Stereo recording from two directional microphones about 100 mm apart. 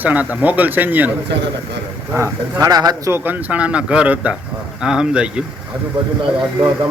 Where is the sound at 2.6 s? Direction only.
40° right (ahead or behind).